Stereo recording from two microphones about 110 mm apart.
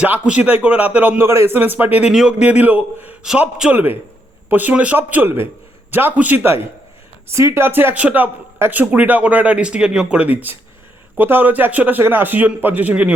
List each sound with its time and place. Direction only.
0.0 s speech: 10° right (ahead or behind)
2.0 s speech: 5° right (ahead or behind)